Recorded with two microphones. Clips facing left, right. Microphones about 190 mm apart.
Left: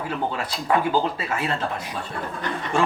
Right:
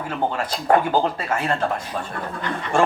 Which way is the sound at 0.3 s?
45° right (ahead or behind).